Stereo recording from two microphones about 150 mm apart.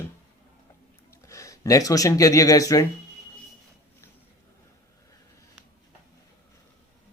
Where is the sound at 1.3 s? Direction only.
20° left (ahead or behind).